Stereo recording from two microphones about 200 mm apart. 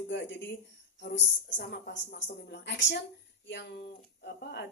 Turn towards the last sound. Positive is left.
turn(degrees=55)  # may be behind; listen again after turning